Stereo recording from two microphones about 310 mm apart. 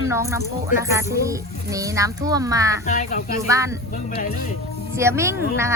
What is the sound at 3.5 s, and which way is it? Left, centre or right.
Speech, centre.